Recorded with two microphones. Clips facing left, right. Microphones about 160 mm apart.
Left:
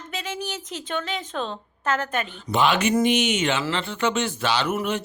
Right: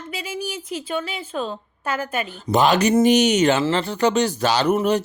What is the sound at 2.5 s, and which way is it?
A woman's voice, 40° right (ahead or behind).